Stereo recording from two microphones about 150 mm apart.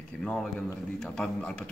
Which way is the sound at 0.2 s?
5° left (ahead or behind).